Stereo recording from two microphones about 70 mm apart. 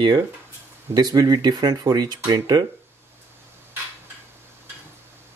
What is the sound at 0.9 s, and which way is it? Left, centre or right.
Speech, right.